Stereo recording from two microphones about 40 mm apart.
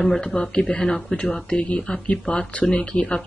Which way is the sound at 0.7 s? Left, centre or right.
Left.